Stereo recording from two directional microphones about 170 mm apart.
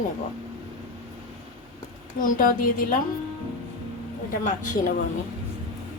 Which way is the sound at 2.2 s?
55° left (ahead or behind).